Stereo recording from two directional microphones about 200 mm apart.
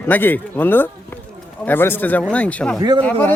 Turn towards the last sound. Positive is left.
turn(degrees=10)  # may be behind; listen again after turning